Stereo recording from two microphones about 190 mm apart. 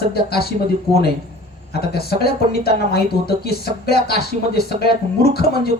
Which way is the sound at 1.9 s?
55° left (ahead or behind).